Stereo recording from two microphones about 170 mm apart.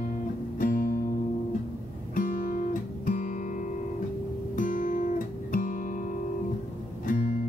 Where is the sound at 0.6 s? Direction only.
55° left (ahead or behind).